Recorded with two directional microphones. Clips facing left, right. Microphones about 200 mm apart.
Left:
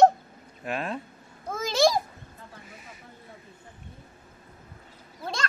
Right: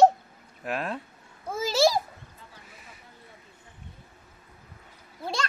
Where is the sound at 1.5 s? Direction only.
5° right (ahead or behind).